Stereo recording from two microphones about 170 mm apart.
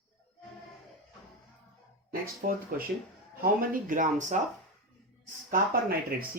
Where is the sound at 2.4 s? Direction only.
55° right (ahead or behind).